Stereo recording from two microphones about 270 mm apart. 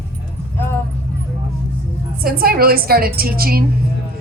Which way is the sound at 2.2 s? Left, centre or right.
Right.